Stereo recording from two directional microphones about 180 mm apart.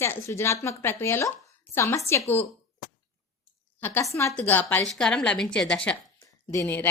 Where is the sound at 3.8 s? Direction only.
10° left (ahead or behind).